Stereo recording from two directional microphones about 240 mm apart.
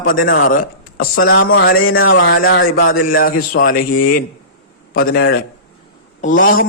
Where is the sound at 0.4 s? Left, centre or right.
Left.